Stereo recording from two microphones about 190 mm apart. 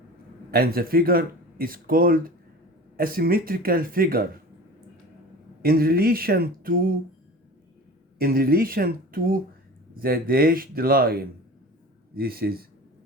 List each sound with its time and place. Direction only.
0.5 s speech: 55° right (ahead or behind)
5.6 s speech: 50° right (ahead or behind)
8.2 s speech: 50° right (ahead or behind)